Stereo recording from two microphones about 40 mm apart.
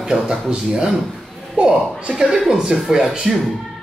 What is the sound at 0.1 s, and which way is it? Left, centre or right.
A man's voice, centre.